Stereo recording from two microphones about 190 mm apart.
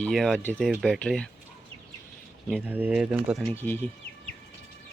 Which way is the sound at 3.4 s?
10° left (ahead or behind).